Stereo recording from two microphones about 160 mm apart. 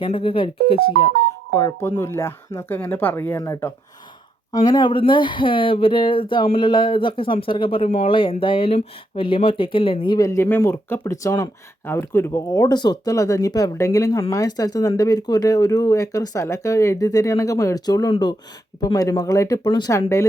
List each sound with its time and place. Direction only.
0.0 s speech: 35° left (ahead or behind)
1.5 s speech: 20° left (ahead or behind)